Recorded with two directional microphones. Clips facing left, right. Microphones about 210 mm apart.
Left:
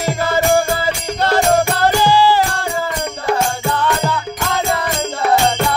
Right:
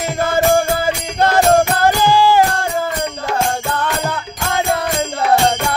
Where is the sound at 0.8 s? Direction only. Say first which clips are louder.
Right 1 dB; 50° right (ahead or behind).